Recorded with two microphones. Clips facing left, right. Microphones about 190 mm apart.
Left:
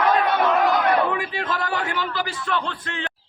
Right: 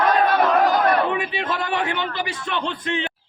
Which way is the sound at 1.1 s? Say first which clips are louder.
Right 1 dB; 20° right (ahead or behind).